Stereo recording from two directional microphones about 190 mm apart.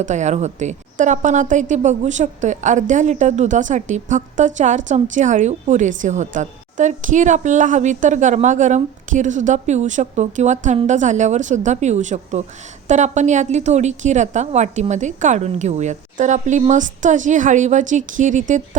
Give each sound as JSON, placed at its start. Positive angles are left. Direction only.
{"t": 0.0, "sound": "a woman's voice", "side_deg": -40}